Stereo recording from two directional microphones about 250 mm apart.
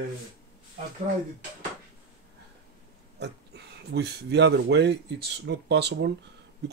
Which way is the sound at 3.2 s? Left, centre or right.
Right.